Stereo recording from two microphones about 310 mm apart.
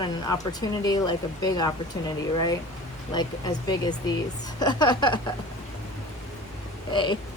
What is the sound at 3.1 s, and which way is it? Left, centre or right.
Speech, centre.